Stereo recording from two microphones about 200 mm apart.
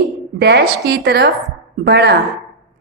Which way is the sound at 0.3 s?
55° right (ahead or behind).